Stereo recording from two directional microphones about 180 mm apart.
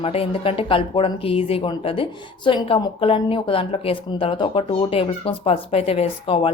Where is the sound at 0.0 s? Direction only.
30° left (ahead or behind).